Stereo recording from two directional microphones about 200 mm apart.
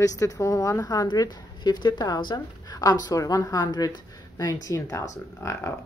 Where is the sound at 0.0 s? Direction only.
15° left (ahead or behind).